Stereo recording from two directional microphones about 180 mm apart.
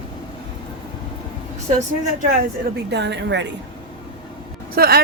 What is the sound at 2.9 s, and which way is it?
Speech, 75° right (ahead or behind).